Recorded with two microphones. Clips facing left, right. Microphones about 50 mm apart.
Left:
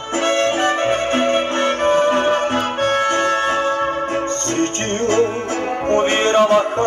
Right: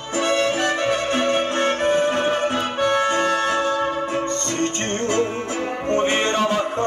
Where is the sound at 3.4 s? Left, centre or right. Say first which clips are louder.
Left 3 dB; left.